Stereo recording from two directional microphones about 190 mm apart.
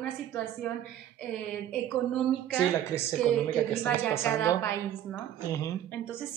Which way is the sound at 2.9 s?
10° left (ahead or behind).